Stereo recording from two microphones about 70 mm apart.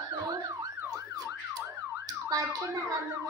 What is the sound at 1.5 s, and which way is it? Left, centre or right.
Emergency vehicle, right.